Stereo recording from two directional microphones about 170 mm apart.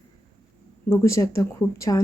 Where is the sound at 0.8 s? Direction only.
15° left (ahead or behind).